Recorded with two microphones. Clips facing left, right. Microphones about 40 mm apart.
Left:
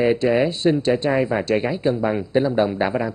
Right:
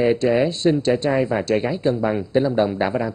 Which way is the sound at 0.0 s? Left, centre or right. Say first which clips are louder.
Even; centre.